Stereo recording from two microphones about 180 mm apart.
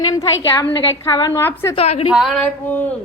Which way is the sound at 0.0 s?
20° left (ahead or behind).